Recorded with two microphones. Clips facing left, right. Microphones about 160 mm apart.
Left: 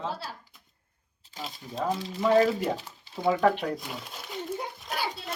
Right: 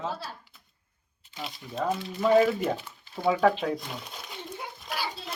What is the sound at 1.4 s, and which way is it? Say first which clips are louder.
Speech: even; 40° left (ahead or behind).